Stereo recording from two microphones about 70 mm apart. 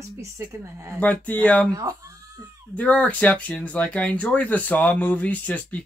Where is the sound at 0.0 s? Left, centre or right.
Right.